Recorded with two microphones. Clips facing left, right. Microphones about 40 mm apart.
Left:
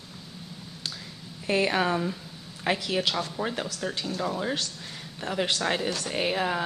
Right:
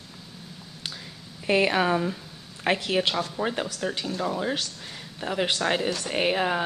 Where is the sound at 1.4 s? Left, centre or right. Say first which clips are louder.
Right 3 dB; centre.